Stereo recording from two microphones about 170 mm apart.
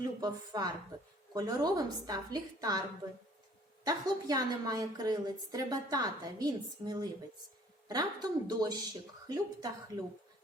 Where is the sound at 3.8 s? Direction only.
20° right (ahead or behind).